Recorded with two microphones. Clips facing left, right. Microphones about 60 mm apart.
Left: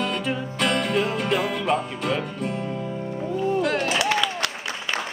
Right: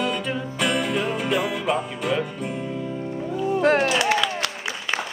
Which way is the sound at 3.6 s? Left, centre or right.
Right.